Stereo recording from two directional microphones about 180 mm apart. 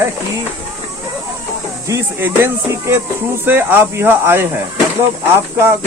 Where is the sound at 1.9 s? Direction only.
15° right (ahead or behind).